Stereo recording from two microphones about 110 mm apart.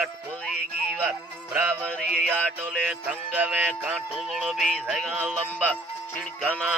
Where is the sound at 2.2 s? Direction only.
5° right (ahead or behind).